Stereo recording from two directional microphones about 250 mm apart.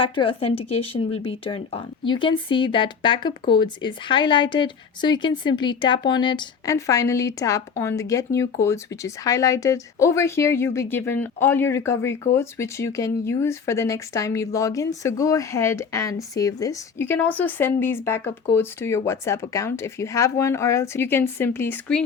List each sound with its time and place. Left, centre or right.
0.0 s speech: left; by 22.0 s centre